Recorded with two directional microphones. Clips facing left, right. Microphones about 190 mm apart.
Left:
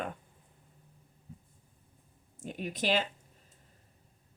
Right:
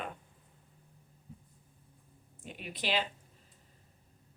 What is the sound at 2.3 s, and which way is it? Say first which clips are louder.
Speech: left 7 dB; 45° left (ahead or behind).